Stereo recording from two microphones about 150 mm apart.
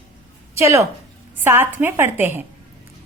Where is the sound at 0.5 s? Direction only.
20° right (ahead or behind).